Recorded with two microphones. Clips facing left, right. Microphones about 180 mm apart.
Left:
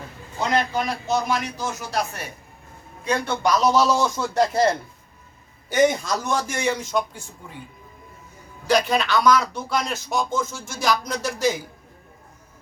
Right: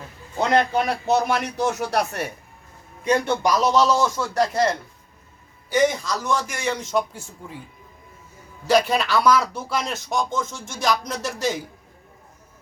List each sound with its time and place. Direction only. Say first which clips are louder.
0.3 s a man's voice: right 3 dB; 60° right (ahead or behind)
3.0 s a man's voice: right 3 dB; 20° right (ahead or behind)
3.8 s speech: right 1 dB; 10° left (ahead or behind)
4.4 s speech: left 2 dB; 25° left (ahead or behind)
5.6 s a woman's voice: left 1 dB; 50° left (ahead or behind)
6.7 s speech: right 2 dB; centre (ahead or behind)
8.6 s speech: right 1 dB; 5° right (ahead or behind)